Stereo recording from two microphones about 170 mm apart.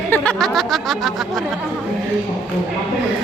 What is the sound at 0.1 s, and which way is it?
Speech, 5° left (ahead or behind).